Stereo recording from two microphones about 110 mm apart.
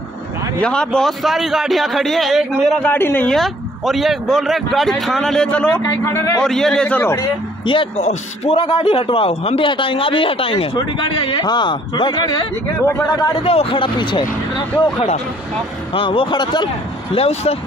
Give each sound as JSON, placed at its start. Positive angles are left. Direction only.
{"t": 0.6, "sound": "speech", "side_deg": 10}
{"t": 2.8, "sound": "a man's voice", "side_deg": 20}
{"t": 3.3, "sound": "speech", "side_deg": 0}
{"t": 6.0, "sound": "a man's voice", "side_deg": 25}
{"t": 6.4, "sound": "a man's voice", "side_deg": 5}
{"t": 7.6, "sound": "a man's voice", "side_deg": 50}
{"t": 13.4, "sound": "a man's voice", "side_deg": 60}
{"t": 15.9, "sound": "a man's voice", "side_deg": 55}
{"t": 17.1, "sound": "speech", "side_deg": 70}